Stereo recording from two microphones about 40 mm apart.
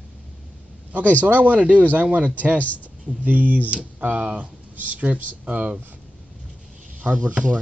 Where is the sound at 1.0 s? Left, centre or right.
Left.